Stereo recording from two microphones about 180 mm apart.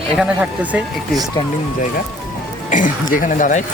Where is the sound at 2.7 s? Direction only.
45° left (ahead or behind).